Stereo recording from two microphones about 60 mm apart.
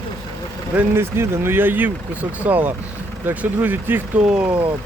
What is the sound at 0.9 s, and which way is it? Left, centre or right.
Speech, right.